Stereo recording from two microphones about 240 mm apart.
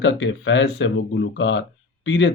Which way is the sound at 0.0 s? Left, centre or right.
Left.